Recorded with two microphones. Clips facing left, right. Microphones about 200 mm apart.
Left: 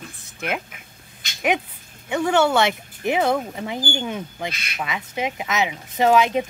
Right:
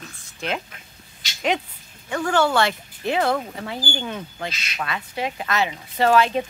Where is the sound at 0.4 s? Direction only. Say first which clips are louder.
Left 1 dB; 10° left (ahead or behind).